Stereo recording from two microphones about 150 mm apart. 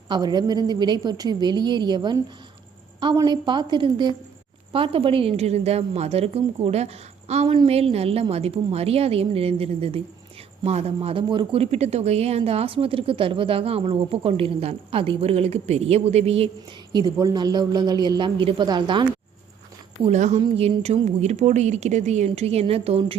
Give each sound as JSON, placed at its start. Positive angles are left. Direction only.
{"t": 0.1, "sound": "a woman's voice", "side_deg": -30}
{"t": 16.9, "sound": "a woman's voice", "side_deg": -25}
{"t": 20.0, "sound": "speech", "side_deg": -50}